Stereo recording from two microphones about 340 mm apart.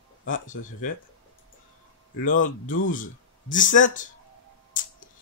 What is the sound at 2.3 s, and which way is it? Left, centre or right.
Speech, left.